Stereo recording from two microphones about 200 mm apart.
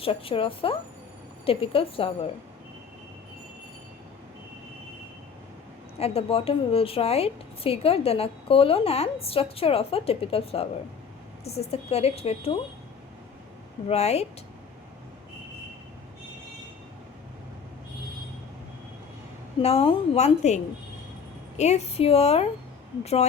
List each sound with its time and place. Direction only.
0.0 s a woman's voice: 25° left (ahead or behind)
6.0 s a woman's voice: 30° left (ahead or behind)
13.8 s a woman's voice: 30° left (ahead or behind)
19.6 s a woman's voice: 30° left (ahead or behind)
21.6 s a woman's voice: 35° left (ahead or behind)